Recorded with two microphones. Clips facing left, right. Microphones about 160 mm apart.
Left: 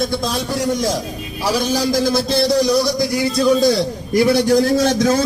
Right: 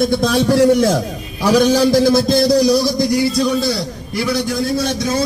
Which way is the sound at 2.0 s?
45° right (ahead or behind).